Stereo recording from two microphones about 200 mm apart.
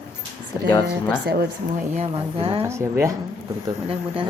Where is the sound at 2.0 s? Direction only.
25° right (ahead or behind).